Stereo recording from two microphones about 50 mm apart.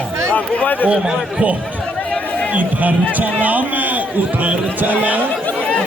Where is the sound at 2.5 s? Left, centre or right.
Right.